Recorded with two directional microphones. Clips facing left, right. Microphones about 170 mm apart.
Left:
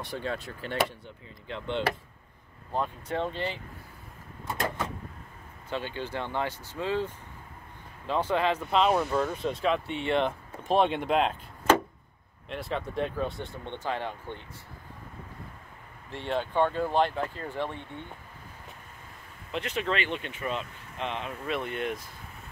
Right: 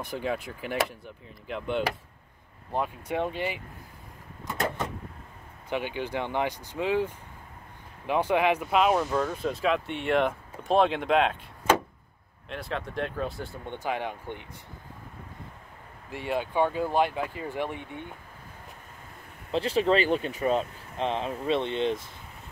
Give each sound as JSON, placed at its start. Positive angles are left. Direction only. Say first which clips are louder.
{"t": 0.2, "sound": "speech", "louder": "right 3 dB", "side_deg": -10}
{"t": 2.7, "sound": "speech", "louder": "right 1 dB", "side_deg": -10}
{"t": 5.7, "sound": "speech", "louder": "right 3 dB", "side_deg": -15}
{"t": 8.1, "sound": "speech", "louder": "right 3 dB", "side_deg": -15}
{"t": 12.4, "sound": "speech", "louder": "left 1 dB", "side_deg": 0}
{"t": 16.1, "sound": "speech", "louder": "right 1 dB", "side_deg": -10}
{"t": 19.5, "sound": "speech", "louder": "right 7 dB", "side_deg": -30}